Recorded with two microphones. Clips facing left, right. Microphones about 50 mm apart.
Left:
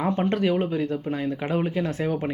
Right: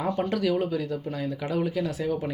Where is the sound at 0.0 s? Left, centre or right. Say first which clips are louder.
Left 3 dB; left.